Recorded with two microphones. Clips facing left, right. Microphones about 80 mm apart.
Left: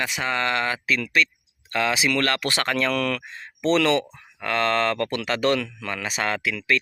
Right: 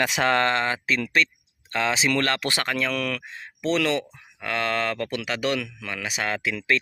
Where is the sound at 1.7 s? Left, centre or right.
Right.